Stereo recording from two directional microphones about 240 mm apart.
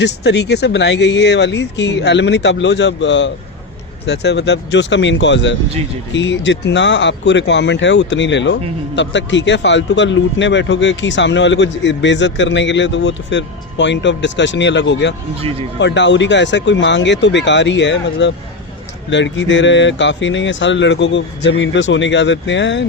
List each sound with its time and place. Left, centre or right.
0.0 s a man's voice: left